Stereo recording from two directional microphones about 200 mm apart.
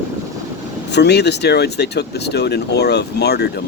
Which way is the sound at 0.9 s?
55° left (ahead or behind).